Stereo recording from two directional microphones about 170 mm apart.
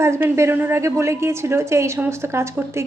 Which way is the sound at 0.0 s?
15° right (ahead or behind).